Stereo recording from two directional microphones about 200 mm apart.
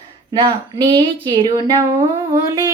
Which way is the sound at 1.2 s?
20° right (ahead or behind).